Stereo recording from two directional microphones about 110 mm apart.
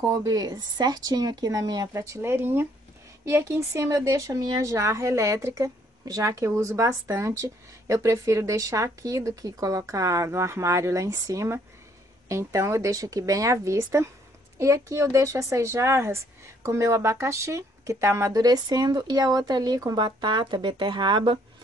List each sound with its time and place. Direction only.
0.2 s speech: 35° right (ahead or behind)